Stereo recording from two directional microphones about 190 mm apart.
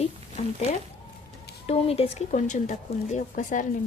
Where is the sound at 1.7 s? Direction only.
30° left (ahead or behind).